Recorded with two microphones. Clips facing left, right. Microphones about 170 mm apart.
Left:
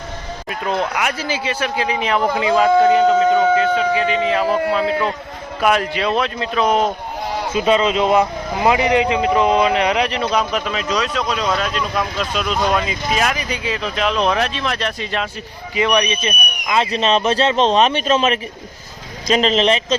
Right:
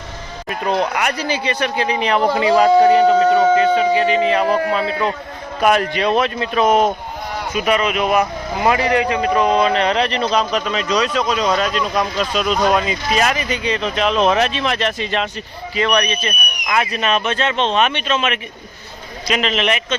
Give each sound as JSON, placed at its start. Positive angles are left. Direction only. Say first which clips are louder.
{"t": 1.3, "sound": "speech", "louder": "right 1 dB", "side_deg": 5}
{"t": 5.6, "sound": "speech", "louder": "right 2 dB", "side_deg": 0}
{"t": 7.3, "sound": "speech", "louder": "left 2 dB", "side_deg": 25}
{"t": 15.7, "sound": "a man's voice", "louder": "left 1 dB", "side_deg": 15}